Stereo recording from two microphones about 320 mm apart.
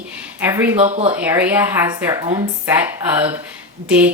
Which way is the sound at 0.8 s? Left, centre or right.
Centre.